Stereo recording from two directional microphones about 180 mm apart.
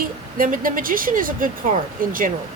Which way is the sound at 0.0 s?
50° right (ahead or behind).